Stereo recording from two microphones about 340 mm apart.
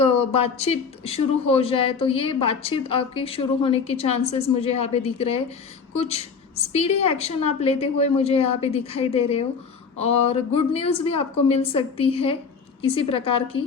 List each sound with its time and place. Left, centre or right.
0.0 s speech: centre